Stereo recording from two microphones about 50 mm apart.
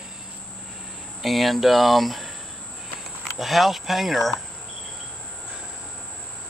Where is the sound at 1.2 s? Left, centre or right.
Centre.